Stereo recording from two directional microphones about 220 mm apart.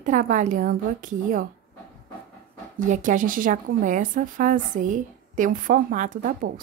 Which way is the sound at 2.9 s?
35° right (ahead or behind).